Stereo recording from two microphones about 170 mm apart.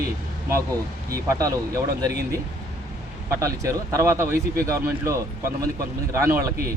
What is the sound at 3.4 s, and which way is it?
Speech, 15° right (ahead or behind).